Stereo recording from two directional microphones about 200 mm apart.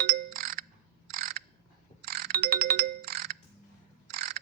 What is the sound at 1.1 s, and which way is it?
Crow, 45° right (ahead or behind).